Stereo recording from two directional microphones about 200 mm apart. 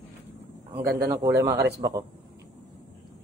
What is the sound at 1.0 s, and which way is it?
Speech, 15° right (ahead or behind).